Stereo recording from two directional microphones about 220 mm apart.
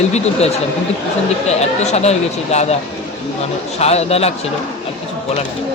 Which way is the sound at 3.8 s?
30° left (ahead or behind).